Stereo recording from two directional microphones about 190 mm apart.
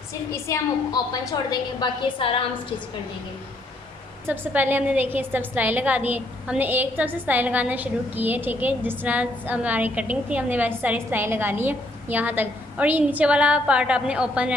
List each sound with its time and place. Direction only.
0.3 s a woman's voice: 15° left (ahead or behind)
4.3 s a woman's voice: 10° right (ahead or behind)